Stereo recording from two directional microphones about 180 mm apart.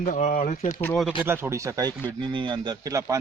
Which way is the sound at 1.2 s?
15° right (ahead or behind).